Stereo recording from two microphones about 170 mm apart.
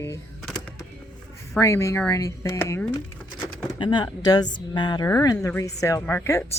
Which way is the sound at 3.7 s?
25° left (ahead or behind).